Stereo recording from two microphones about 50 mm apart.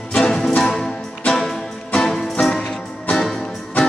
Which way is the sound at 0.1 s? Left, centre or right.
Centre.